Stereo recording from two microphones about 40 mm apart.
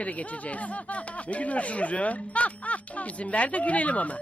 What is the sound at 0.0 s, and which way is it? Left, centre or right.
Speech, left.